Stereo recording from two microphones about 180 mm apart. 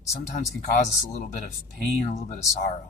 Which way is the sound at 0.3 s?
40° left (ahead or behind).